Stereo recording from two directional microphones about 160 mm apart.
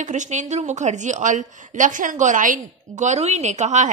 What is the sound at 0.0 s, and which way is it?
A woman's voice, 50° right (ahead or behind).